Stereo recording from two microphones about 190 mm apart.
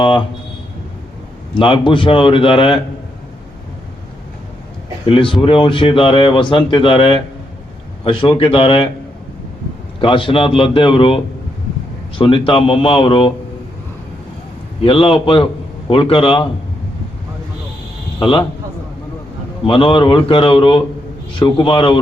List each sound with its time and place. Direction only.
1.5 s speech: 25° left (ahead or behind)
5.0 s speech: 25° left (ahead or behind)
10.0 s speech: 25° left (ahead or behind)
14.8 s speech: 30° left (ahead or behind)
18.2 s speech: 25° left (ahead or behind)
19.6 s speech: 25° left (ahead or behind)